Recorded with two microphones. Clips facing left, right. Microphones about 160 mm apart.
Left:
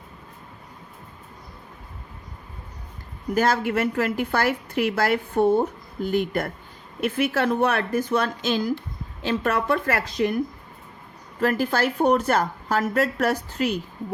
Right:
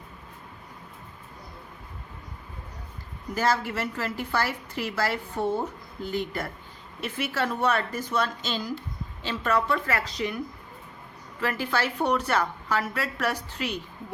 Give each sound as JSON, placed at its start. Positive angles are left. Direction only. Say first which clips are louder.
{"t": 3.3, "sound": "a woman's voice", "louder": "left 5 dB", "side_deg": 55}